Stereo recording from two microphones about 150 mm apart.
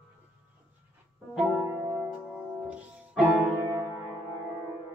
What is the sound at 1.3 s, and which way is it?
Music, 5° right (ahead or behind).